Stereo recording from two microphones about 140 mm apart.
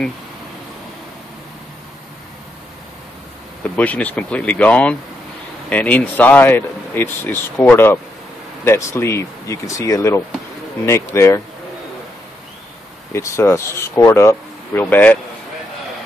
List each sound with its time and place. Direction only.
3.6 s speech: 10° left (ahead or behind)
13.1 s speech: 20° left (ahead or behind)